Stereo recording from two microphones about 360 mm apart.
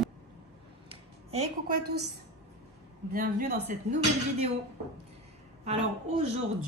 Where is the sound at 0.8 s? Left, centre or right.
Centre.